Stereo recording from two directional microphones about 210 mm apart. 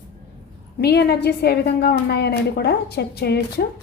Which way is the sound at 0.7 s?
50° left (ahead or behind).